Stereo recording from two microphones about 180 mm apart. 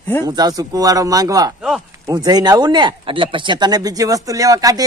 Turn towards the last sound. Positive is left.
turn(degrees=-20)  # may be behind; listen again after turning